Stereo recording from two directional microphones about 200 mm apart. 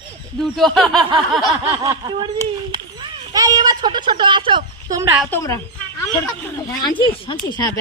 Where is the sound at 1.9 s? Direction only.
20° right (ahead or behind).